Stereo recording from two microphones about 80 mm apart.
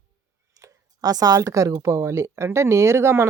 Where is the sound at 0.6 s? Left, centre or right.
Right.